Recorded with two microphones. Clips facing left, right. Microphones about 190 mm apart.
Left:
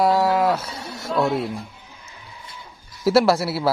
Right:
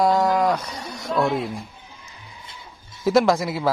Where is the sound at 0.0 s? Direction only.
5° left (ahead or behind).